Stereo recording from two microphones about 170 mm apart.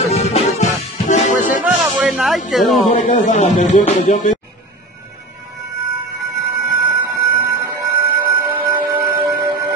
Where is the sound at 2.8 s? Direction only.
45° left (ahead or behind).